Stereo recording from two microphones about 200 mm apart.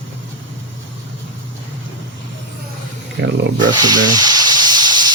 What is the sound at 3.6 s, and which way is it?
Hiss, 20° right (ahead or behind).